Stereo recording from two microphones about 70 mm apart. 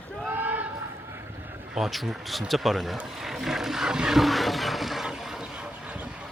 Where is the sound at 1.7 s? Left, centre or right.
Centre.